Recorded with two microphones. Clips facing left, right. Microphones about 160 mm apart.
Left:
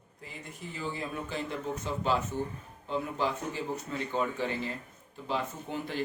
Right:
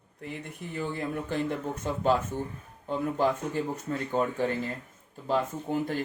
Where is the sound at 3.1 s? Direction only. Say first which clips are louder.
Right 5 dB; 50° right (ahead or behind).